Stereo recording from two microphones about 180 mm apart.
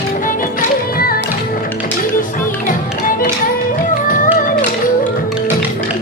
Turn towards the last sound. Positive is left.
turn(degrees=50)  # may be behind; listen again after turning